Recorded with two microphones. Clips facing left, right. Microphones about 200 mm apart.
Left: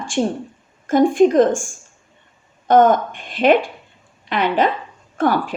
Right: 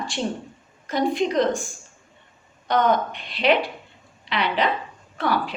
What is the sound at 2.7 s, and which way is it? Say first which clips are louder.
A woman's voice: left 7 dB; 50° left (ahead or behind).